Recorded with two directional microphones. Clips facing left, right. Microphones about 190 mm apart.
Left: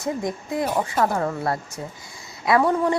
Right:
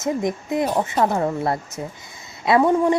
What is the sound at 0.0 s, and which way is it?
A woman's voice, 20° right (ahead or behind).